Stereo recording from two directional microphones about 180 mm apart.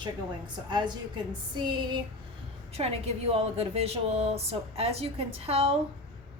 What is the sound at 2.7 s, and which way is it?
A woman's voice, 35° right (ahead or behind).